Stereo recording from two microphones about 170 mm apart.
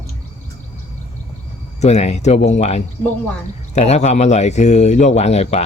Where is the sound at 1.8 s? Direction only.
40° left (ahead or behind).